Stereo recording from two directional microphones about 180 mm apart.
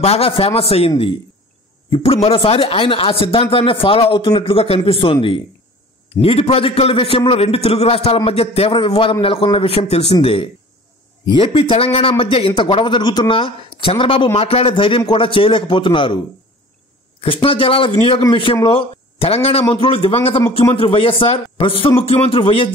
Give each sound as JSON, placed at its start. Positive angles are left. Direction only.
{"t": 0.0, "sound": "speech", "side_deg": 30}
{"t": 2.2, "sound": "a man's voice", "side_deg": 30}
{"t": 17.2, "sound": "a man's voice", "side_deg": 30}